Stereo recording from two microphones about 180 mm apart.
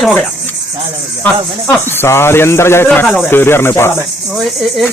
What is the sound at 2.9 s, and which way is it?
Speech, 5° left (ahead or behind).